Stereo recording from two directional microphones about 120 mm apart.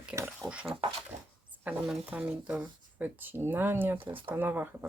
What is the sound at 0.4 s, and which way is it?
Speech, 10° right (ahead or behind).